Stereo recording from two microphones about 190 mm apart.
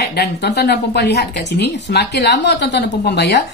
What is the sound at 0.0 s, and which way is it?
Speech, 60° left (ahead or behind).